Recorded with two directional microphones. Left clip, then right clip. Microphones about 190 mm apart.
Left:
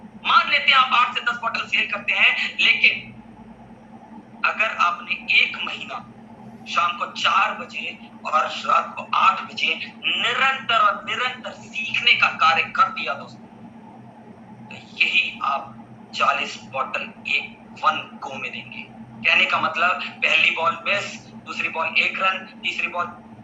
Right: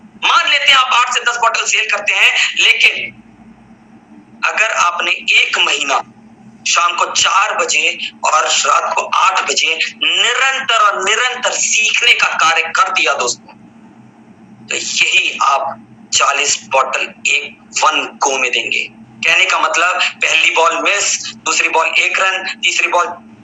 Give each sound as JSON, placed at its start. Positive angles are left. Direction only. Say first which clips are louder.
{"t": 0.2, "sound": "a man's voice", "louder": "right 6 dB", "side_deg": -50}
{"t": 4.4, "sound": "a man's voice", "louder": "right 7 dB", "side_deg": -50}
{"t": 14.7, "sound": "a man's voice", "louder": "right 8 dB", "side_deg": -50}